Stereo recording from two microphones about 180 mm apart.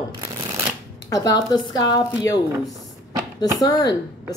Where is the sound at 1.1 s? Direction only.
20° left (ahead or behind).